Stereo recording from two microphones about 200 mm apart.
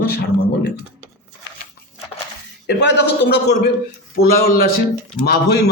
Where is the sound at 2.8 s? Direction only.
60° left (ahead or behind).